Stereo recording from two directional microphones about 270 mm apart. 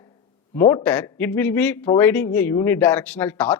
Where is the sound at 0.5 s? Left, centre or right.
Centre.